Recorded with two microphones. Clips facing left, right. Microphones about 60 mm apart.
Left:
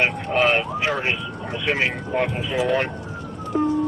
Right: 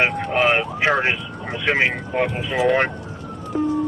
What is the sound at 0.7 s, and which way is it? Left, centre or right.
Speech, right.